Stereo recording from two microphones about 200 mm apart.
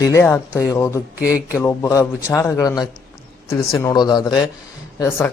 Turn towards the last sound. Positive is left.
turn(degrees=10)  # may be behind; listen again after turning